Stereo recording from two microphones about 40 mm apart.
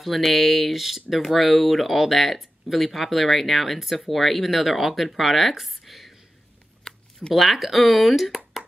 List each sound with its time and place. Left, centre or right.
0.0 s speech: centre
6.8 s a sound: centre
7.3 s speech: centre